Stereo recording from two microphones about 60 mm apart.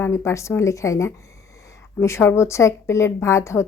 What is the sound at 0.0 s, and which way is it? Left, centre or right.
Speech, left.